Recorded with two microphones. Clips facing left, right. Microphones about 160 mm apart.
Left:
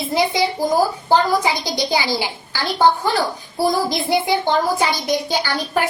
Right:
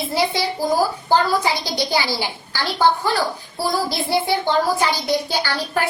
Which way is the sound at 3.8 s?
20° left (ahead or behind).